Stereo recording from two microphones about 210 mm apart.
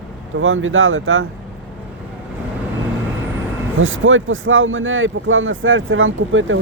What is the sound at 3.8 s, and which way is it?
Speech, 70° right (ahead or behind).